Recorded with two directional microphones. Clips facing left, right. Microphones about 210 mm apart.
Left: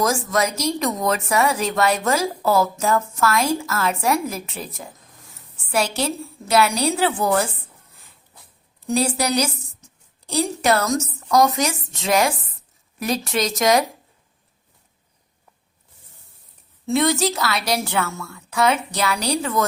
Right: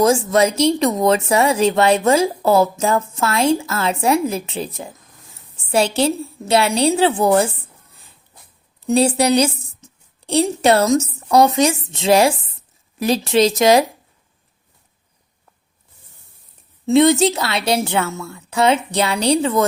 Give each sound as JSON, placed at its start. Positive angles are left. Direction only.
{"t": 0.0, "sound": "a woman's voice", "side_deg": -25}
{"t": 9.0, "sound": "a woman's voice", "side_deg": -30}
{"t": 16.8, "sound": "a woman's voice", "side_deg": -25}